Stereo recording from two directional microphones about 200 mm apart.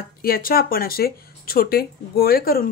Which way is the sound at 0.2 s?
45° left (ahead or behind).